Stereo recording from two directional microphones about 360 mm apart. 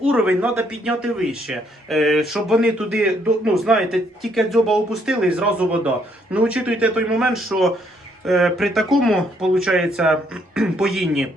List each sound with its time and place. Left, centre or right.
0.1 s speech: centre